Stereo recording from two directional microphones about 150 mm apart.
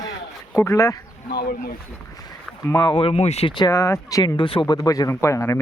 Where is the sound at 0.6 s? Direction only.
20° left (ahead or behind).